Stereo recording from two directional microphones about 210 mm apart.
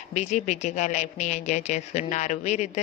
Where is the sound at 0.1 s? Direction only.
35° left (ahead or behind).